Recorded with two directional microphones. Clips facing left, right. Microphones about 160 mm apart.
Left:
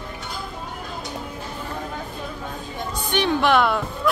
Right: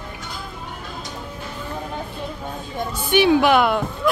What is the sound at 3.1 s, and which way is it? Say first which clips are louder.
Speech: right 5 dB; 10° right (ahead or behind).